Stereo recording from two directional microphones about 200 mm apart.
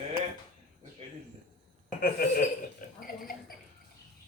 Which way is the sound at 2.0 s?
50° left (ahead or behind).